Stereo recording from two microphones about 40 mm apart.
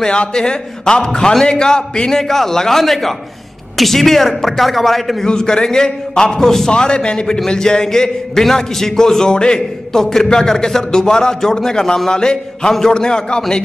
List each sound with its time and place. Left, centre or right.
0.0 s a man's voice: left; by 5.2 s centre
5.2 s a man's voice: centre
6.7 s a man's voice: left